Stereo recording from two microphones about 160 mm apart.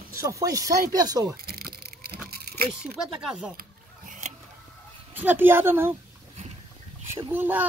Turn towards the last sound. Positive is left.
turn(degrees=-10)  # may be behind; listen again after turning